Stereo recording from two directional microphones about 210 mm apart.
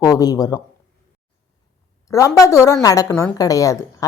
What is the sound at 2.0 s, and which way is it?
Speech, 15° left (ahead or behind).